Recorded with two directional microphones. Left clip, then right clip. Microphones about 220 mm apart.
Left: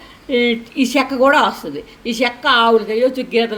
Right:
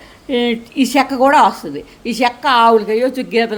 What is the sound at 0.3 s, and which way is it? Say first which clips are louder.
A woman's voice: left 1 dB; 25° right (ahead or behind).